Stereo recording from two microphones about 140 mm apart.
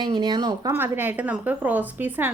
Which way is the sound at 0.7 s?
15° right (ahead or behind).